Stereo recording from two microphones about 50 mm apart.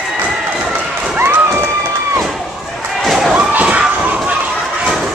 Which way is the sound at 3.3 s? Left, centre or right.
Right.